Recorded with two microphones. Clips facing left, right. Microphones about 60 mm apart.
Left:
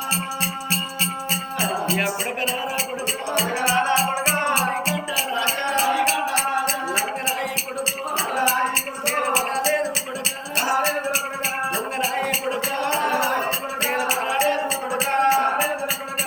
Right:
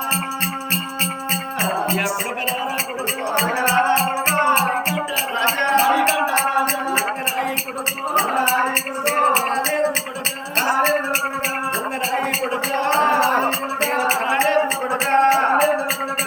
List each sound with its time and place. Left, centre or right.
3.3 s music: right
8.1 s music: right
10.6 s mantra: right
12.7 s music: right